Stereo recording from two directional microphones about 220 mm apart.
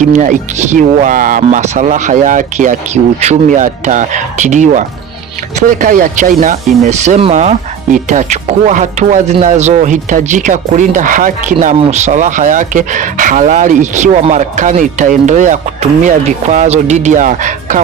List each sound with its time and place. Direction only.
0.1 s speech: 35° right (ahead or behind)